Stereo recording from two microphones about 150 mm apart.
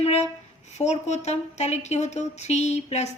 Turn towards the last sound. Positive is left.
turn(degrees=45)  # may be behind; listen again after turning